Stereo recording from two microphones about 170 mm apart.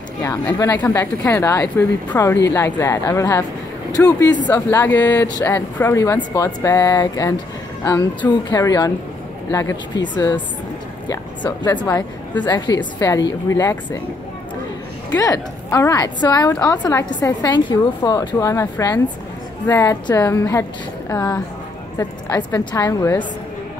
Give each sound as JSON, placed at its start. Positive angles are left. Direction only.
{"t": 0.2, "sound": "a woman's voice", "side_deg": 20}
{"t": 12.4, "sound": "a woman's voice", "side_deg": 25}
{"t": 15.1, "sound": "a woman's voice", "side_deg": 20}